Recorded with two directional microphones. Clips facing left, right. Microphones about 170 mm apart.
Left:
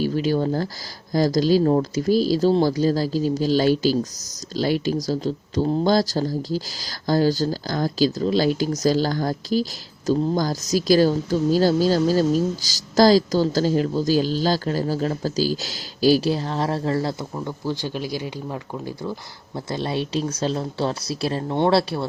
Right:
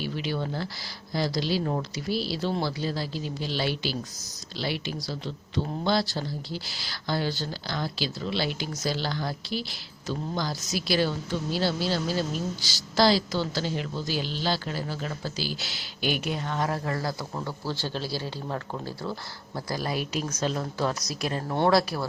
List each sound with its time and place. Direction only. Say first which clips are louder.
0.0 s speech: left 10 dB; 40° left (ahead or behind)
17.3 s speech: left 5 dB; 15° left (ahead or behind)
19.5 s speech: left 5 dB; 25° left (ahead or behind)